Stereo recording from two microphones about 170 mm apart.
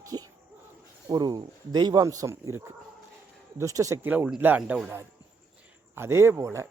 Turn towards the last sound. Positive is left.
turn(degrees=-15)  # may be behind; listen again after turning